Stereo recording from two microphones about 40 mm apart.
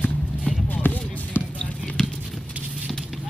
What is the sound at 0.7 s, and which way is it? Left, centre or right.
Music, left.